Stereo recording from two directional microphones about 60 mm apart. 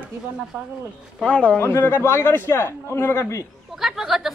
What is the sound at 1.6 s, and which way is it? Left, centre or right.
A man's voice, left.